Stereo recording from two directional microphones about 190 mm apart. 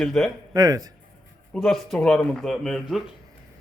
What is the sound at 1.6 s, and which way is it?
A man's voice, centre (ahead or behind).